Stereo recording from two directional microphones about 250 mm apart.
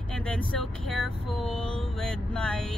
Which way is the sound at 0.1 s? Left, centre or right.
Centre.